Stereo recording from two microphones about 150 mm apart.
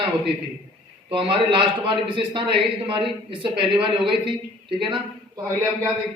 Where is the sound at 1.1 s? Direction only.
35° right (ahead or behind).